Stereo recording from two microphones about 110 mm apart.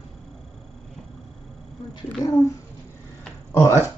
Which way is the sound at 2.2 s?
35° left (ahead or behind).